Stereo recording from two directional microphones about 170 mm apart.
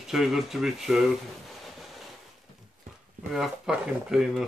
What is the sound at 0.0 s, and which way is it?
Speech, centre (ahead or behind).